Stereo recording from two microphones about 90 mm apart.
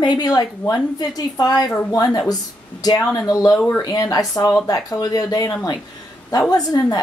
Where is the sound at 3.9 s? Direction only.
40° left (ahead or behind).